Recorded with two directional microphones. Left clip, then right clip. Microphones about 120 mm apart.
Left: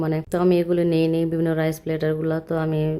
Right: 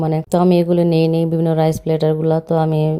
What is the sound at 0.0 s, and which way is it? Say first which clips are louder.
Speech: right 5 dB; 25° right (ahead or behind).